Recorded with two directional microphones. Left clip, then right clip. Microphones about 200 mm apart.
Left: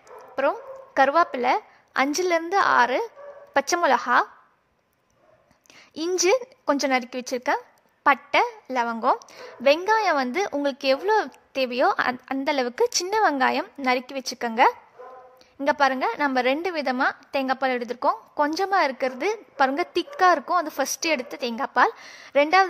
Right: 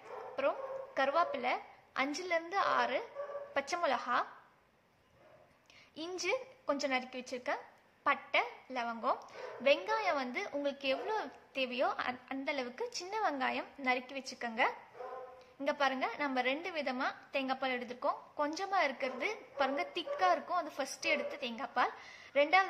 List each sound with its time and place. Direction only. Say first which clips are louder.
0.4 s a woman's voice: left 11 dB; 55° left (ahead or behind)
5.9 s a woman's voice: left 15 dB; 55° left (ahead or behind)